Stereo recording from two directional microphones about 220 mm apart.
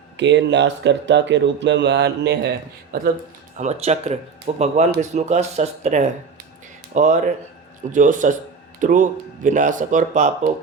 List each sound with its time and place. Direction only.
0.2 s speech: 55° right (ahead or behind)
3.6 s speech: 30° right (ahead or behind)